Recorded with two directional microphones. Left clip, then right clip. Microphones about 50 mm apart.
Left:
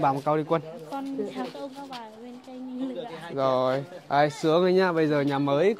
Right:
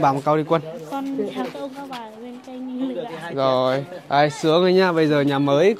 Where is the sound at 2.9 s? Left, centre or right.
Centre.